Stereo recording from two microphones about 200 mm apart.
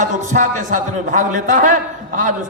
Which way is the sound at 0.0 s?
40° right (ahead or behind).